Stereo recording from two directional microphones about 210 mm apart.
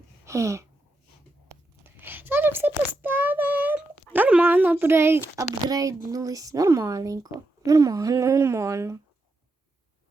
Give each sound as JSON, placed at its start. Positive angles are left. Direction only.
{"t": 0.3, "sound": "a sound", "side_deg": -15}
{"t": 1.8, "sound": "child singing", "side_deg": -10}
{"t": 5.6, "sound": "speech", "side_deg": -15}